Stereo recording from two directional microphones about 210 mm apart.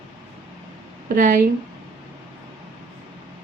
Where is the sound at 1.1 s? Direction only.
40° right (ahead or behind).